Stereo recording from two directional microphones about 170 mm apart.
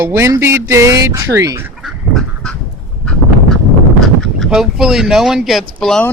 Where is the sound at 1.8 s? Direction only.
Centre (ahead or behind).